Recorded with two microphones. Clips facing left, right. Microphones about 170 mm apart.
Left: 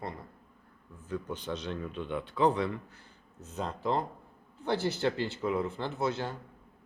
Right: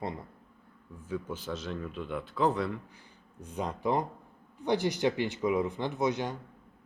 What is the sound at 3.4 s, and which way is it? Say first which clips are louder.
Speech: right 2 dB; 15° right (ahead or behind).